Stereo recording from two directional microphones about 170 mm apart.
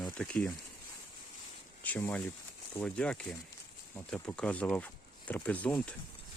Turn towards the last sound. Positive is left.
turn(degrees=10)  # may be behind; listen again after turning